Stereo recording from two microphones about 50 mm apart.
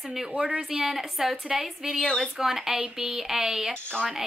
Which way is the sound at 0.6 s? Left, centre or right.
Centre.